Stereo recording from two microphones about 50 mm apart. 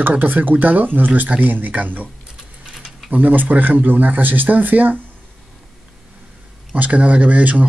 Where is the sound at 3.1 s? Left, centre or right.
Right.